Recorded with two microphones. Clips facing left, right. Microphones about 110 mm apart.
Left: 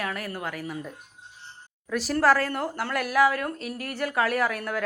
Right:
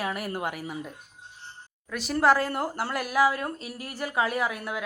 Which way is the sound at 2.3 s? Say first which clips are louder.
Even; 30° right (ahead or behind).